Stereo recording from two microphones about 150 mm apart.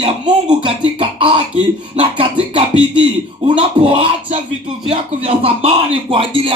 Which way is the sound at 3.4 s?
35° right (ahead or behind).